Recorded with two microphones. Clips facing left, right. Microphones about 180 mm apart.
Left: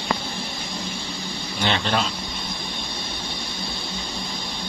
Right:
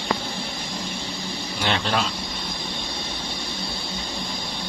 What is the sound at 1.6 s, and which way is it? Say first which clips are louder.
Speech: left 1 dB; centre (ahead or behind).